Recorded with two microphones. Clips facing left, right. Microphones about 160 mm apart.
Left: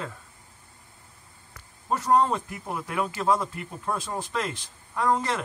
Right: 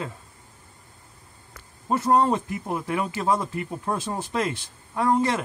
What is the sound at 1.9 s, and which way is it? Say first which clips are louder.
Speech: right 2 dB; 20° right (ahead or behind).